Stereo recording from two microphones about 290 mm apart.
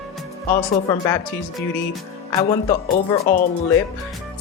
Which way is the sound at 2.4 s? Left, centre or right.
Centre.